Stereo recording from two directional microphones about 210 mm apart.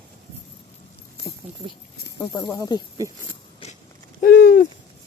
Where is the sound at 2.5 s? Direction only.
20° left (ahead or behind).